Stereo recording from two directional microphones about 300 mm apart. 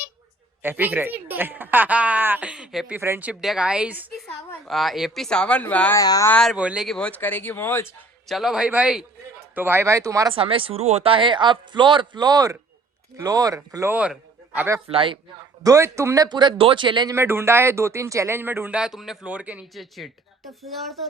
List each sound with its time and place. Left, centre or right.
0.6 s speech: centre
14.8 s speech: centre